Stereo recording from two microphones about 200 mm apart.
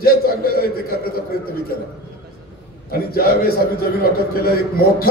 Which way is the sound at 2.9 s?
50° left (ahead or behind).